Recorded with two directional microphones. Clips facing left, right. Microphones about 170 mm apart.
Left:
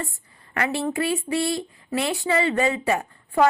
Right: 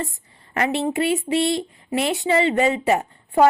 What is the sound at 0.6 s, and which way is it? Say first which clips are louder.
A woman's voice: right 3 dB; 25° right (ahead or behind).